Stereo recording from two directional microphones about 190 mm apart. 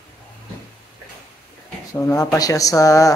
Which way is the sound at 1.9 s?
15° left (ahead or behind).